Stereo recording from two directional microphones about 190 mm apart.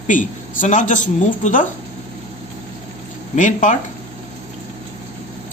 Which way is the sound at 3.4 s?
40° left (ahead or behind).